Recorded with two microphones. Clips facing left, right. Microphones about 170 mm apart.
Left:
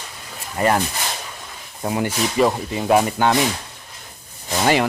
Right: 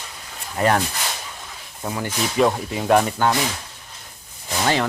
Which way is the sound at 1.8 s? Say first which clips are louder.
Left 5 dB; 15° left (ahead or behind).